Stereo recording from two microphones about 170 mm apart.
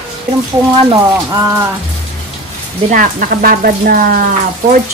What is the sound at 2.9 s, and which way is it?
Speech, 55° right (ahead or behind).